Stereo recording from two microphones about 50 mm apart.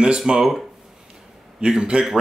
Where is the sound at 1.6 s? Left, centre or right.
Centre.